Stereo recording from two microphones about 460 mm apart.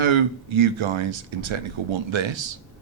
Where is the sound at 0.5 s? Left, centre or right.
Right.